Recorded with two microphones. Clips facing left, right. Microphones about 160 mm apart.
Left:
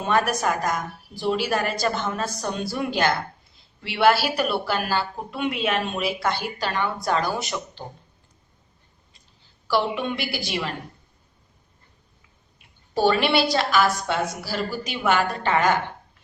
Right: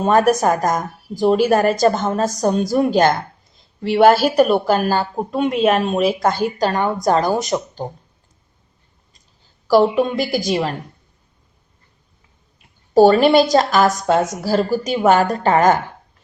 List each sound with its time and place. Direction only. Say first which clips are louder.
0.0 s speech: right 8 dB; 40° right (ahead or behind)
9.6 s a woman's voice: right 10 dB; 40° right (ahead or behind)
12.9 s a woman's voice: right 10 dB; 40° right (ahead or behind)